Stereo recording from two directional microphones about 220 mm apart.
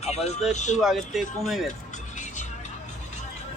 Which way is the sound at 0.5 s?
30° left (ahead or behind).